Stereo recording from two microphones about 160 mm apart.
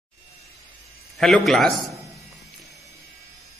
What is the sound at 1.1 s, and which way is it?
Speech, centre (ahead or behind).